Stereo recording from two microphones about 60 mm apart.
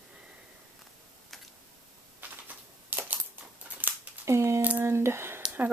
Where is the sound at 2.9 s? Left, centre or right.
Right.